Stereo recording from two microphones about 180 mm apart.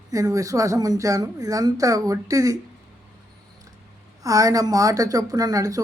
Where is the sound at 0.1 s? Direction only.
20° right (ahead or behind).